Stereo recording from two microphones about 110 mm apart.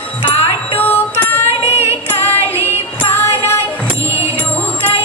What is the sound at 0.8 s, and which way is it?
Female singing, 15° left (ahead or behind).